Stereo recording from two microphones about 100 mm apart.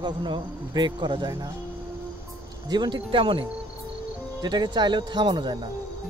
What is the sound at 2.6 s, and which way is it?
Speech, 45° right (ahead or behind).